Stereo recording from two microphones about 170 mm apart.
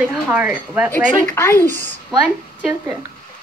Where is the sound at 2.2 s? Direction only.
5° right (ahead or behind).